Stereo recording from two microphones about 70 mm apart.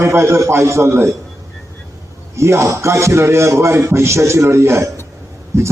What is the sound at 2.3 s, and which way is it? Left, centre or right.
A man's voice, right.